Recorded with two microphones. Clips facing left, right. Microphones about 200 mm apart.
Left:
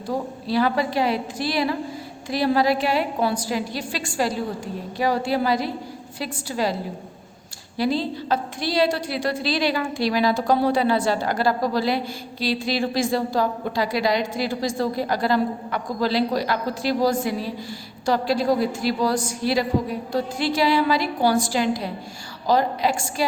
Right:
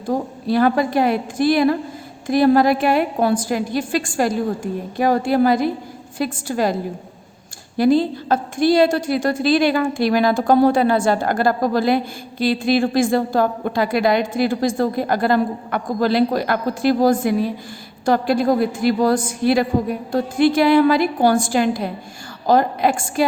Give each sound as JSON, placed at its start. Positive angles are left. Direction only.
{"t": 0.1, "sound": "a woman's voice", "side_deg": -50}
{"t": 7.8, "sound": "a woman's voice", "side_deg": -50}